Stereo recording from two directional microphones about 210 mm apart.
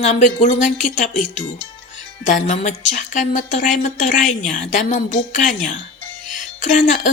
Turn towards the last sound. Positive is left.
turn(degrees=35)  # may be behind; listen again after turning